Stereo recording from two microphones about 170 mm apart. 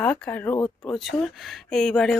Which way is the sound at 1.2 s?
Centre (ahead or behind).